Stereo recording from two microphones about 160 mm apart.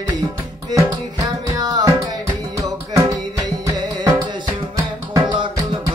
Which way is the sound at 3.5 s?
25° right (ahead or behind).